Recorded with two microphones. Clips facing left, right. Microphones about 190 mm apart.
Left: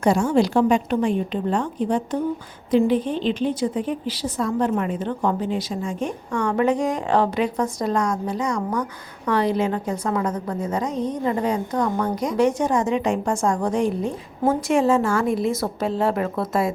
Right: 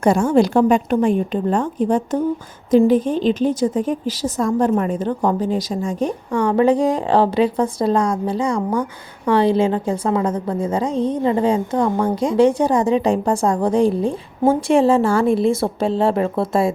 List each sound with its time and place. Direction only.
0.0 s a woman's voice: 50° right (ahead or behind); by 16.7 s 30° right (ahead or behind)